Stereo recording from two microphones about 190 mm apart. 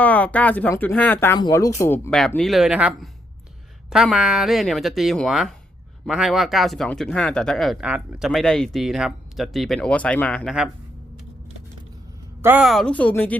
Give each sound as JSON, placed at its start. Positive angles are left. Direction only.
{"t": 0.0, "sound": "speech", "side_deg": 10}
{"t": 2.0, "sound": "speech", "side_deg": 5}
{"t": 12.4, "sound": "speech", "side_deg": -10}